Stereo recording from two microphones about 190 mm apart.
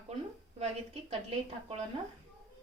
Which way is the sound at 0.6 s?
30° right (ahead or behind).